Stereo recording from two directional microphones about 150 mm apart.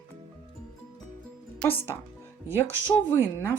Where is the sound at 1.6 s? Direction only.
15° left (ahead or behind).